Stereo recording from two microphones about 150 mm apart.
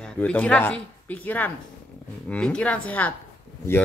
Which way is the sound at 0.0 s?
10° left (ahead or behind).